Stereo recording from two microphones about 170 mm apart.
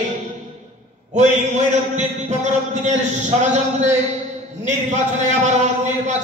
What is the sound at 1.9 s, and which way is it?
A man's voice, 45° right (ahead or behind).